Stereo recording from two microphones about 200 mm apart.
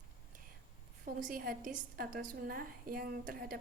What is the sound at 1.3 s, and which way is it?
A woman's voice, 45° right (ahead or behind).